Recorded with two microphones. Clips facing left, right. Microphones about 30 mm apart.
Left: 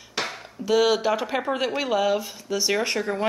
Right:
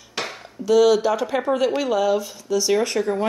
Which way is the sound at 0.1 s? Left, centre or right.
Centre.